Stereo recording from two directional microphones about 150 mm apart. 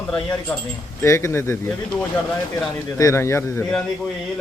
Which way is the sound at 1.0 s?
20° left (ahead or behind).